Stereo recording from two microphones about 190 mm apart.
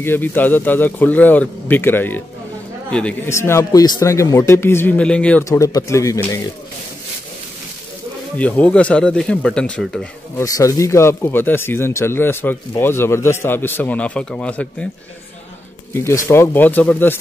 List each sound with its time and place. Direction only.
0.0 s speech: 10° left (ahead or behind)
5.5 s speech: 20° left (ahead or behind)
8.4 s speech: 5° left (ahead or behind)
10.4 s speech: 15° left (ahead or behind)
15.9 s speech: 15° left (ahead or behind)